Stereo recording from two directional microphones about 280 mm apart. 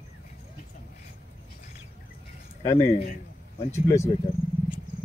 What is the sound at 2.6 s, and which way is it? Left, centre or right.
Speech, centre.